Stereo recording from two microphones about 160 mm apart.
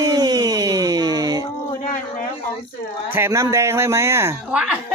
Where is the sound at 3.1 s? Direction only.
15° right (ahead or behind).